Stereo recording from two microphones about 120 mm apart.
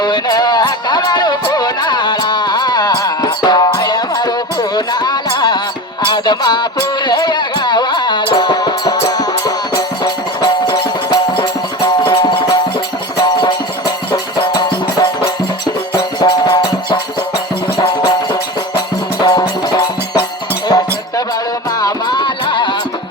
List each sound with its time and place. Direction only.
0.0 s music: 35° left (ahead or behind)